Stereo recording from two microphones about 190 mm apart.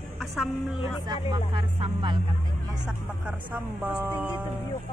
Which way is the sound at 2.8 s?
5° right (ahead or behind).